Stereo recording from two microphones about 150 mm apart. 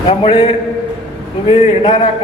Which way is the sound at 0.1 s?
35° left (ahead or behind).